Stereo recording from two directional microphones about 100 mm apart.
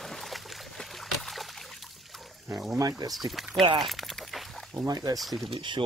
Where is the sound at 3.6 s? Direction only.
55° right (ahead or behind).